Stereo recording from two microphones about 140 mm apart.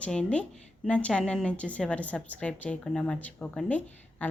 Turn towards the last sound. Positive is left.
turn(degrees=10)  # may be behind; listen again after turning